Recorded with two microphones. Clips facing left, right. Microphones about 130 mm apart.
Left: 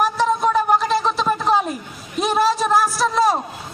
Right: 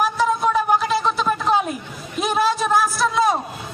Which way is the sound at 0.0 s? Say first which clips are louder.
Left 1 dB; centre (ahead or behind).